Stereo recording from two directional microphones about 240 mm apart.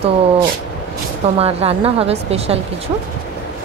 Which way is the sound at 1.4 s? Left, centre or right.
Right.